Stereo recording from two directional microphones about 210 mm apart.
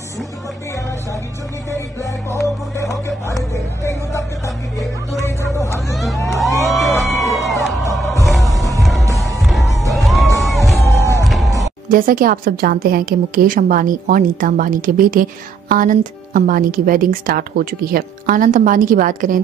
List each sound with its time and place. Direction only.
3.3 s speech: 15° left (ahead or behind)
5.2 s hubbub: 15° left (ahead or behind)
6.2 s music: centre (ahead or behind)
11.9 s speech: 40° right (ahead or behind)